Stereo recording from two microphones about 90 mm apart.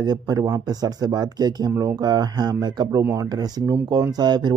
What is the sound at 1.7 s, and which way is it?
Speech, 35° right (ahead or behind).